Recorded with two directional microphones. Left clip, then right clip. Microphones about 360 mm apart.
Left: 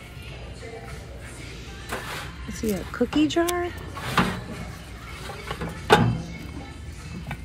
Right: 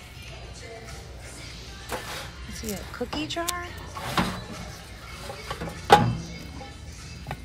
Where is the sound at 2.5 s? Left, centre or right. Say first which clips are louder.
Left 7 dB; right.